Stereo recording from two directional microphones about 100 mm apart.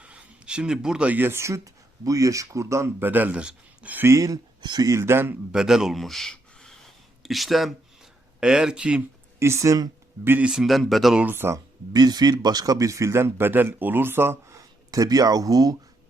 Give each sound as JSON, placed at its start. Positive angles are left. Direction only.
{"t": 0.0, "sound": "speech", "side_deg": -10}
{"t": 4.0, "sound": "speech", "side_deg": -30}
{"t": 4.6, "sound": "speech", "side_deg": -45}
{"t": 4.9, "sound": "a man's voice", "side_deg": -25}
{"t": 5.5, "sound": "speech", "side_deg": -5}
{"t": 9.4, "sound": "speech", "side_deg": -30}
{"t": 10.2, "sound": "speech", "side_deg": -20}
{"t": 10.5, "sound": "speech", "side_deg": 0}
{"t": 11.2, "sound": "a man's voice", "side_deg": -20}
{"t": 11.9, "sound": "speech", "side_deg": -40}